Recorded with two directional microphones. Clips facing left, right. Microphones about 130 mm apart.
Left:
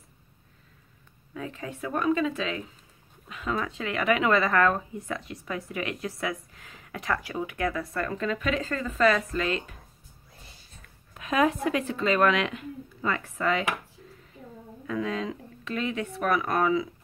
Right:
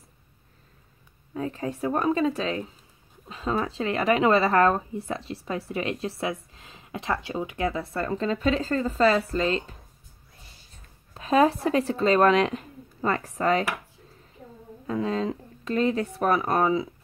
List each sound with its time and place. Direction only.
1.3 s speech: 35° right (ahead or behind)
11.1 s speech: 35° right (ahead or behind)
14.9 s speech: 35° right (ahead or behind)